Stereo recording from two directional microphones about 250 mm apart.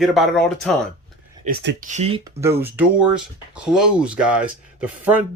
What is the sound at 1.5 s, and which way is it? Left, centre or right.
Speech, right.